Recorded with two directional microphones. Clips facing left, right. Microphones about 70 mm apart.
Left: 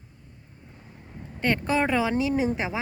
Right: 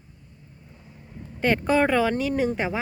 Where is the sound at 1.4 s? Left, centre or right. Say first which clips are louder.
Right 3 dB; centre.